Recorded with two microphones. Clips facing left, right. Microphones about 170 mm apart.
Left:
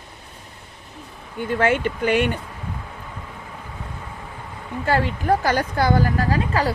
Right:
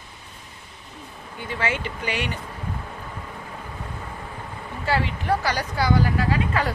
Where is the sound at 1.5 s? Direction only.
55° left (ahead or behind).